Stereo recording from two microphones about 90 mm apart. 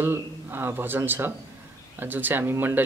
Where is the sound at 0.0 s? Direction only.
25° right (ahead or behind).